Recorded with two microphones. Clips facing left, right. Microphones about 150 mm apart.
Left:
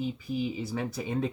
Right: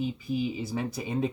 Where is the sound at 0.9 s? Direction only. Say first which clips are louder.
Right 1 dB; 15° right (ahead or behind).